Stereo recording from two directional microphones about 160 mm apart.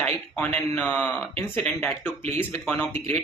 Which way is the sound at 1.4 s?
15° left (ahead or behind).